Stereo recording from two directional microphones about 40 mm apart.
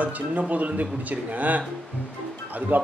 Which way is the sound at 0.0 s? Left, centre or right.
Right.